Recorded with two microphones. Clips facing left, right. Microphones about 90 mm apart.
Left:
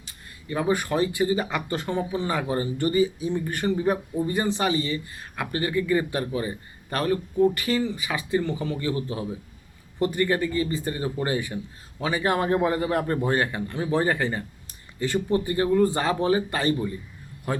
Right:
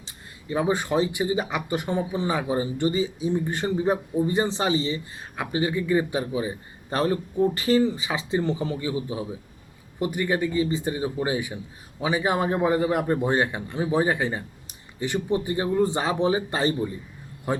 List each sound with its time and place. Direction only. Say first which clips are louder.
0.0 s speech: right 1 dB; 20° right (ahead or behind)
6.9 s speech: even; 25° right (ahead or behind)
8.8 s a man's voice: even; 10° right (ahead or behind)